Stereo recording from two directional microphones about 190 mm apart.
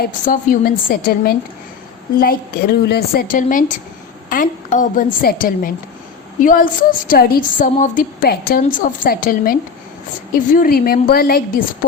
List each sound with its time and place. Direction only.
0.3 s a woman's voice: 50° left (ahead or behind)